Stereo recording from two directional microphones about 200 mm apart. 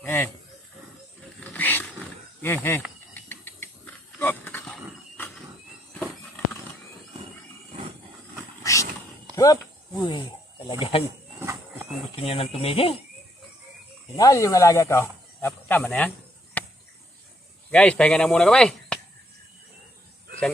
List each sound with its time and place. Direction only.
0.0 s wild animals: 10° left (ahead or behind)
1.5 s roaring cats: 10° left (ahead or behind)
3.2 s a sound: 10° left (ahead or behind)
8.6 s a sound: 15° left (ahead or behind)
10.7 s speech: 25° left (ahead or behind)
11.3 s a sound: 10° right (ahead or behind)
12.2 s speech: 30° left (ahead or behind)
14.2 s speech: 15° left (ahead or behind)
16.6 s chop: 10° left (ahead or behind)
17.7 s speech: 5° left (ahead or behind)